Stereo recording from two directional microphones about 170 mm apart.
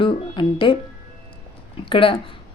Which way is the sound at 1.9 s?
30° left (ahead or behind).